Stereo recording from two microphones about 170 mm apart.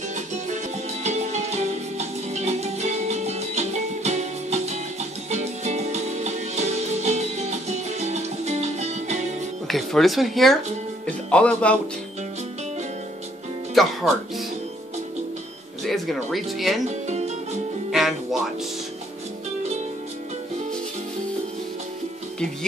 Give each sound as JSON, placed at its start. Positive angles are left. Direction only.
{"t": 0.1, "sound": "music", "side_deg": -45}
{"t": 9.7, "sound": "speech", "side_deg": 0}
{"t": 13.7, "sound": "music", "side_deg": 0}
{"t": 15.8, "sound": "speech", "side_deg": 0}
{"t": 16.8, "sound": "music", "side_deg": -40}
{"t": 17.9, "sound": "music", "side_deg": 0}